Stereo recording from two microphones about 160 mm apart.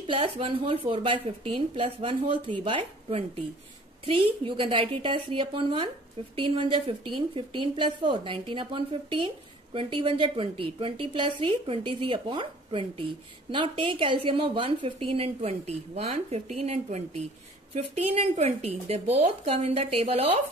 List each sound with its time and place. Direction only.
0.0 s a woman's voice: 30° right (ahead or behind)